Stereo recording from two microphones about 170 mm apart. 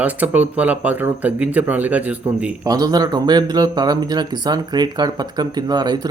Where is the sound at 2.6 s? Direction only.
20° right (ahead or behind).